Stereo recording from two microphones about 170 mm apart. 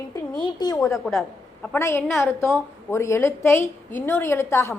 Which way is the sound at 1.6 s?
15° left (ahead or behind).